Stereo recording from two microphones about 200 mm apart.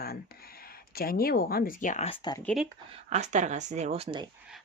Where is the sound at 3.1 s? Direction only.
35° right (ahead or behind).